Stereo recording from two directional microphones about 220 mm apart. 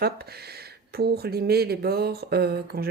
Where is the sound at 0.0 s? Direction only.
45° right (ahead or behind).